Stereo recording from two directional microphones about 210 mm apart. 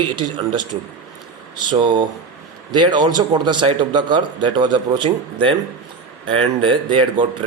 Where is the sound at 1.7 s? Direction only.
20° right (ahead or behind).